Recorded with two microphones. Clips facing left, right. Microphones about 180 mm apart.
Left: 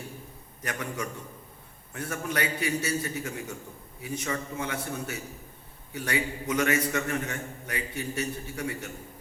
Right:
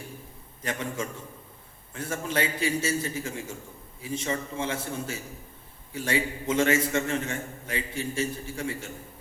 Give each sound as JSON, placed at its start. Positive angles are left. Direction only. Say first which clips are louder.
{"t": 0.6, "sound": "a man's voice", "louder": "right 2 dB", "side_deg": -25}